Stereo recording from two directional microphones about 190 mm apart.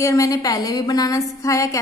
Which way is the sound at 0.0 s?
15° left (ahead or behind).